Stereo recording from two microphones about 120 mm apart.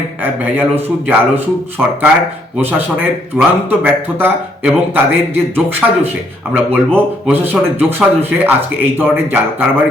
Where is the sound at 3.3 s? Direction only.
15° right (ahead or behind).